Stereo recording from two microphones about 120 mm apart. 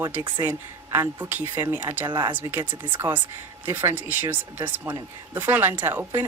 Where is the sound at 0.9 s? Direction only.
15° right (ahead or behind).